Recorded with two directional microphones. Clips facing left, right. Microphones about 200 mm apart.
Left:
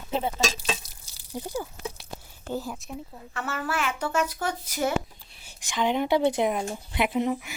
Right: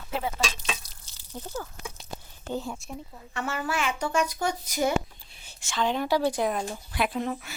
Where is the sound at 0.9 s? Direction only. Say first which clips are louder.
Left 5 dB; 10° left (ahead or behind).